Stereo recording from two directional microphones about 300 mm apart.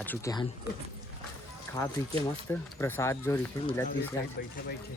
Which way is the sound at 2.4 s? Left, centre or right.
Centre.